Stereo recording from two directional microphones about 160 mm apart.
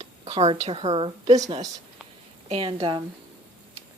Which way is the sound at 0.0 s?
40° right (ahead or behind).